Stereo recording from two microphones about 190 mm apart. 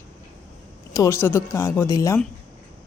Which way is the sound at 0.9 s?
15° left (ahead or behind).